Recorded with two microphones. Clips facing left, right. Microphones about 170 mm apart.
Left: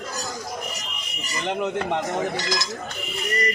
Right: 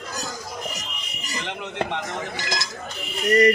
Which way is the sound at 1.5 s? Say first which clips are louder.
Left 5 dB; 40° left (ahead or behind).